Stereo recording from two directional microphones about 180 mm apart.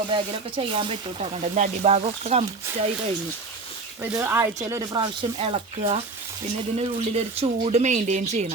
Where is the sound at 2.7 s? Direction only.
15° right (ahead or behind).